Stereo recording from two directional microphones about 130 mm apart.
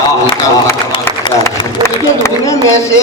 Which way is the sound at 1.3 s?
40° left (ahead or behind).